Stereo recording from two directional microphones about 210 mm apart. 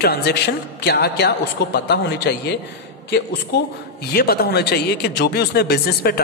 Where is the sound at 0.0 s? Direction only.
50° left (ahead or behind).